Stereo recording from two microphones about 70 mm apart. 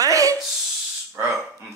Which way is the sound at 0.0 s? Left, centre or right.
Right.